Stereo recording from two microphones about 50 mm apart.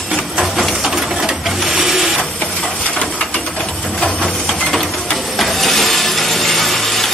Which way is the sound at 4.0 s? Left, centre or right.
Centre.